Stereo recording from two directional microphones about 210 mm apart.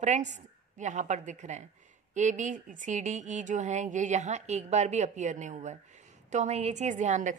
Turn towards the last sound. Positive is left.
turn(degrees=-35)  # may be behind; listen again after turning